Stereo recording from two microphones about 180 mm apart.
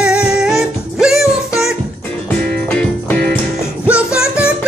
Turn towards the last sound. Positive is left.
turn(degrees=-5)  # may be behind; listen again after turning